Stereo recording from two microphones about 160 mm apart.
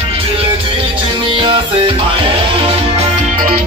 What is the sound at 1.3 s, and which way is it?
Music, 30° right (ahead or behind).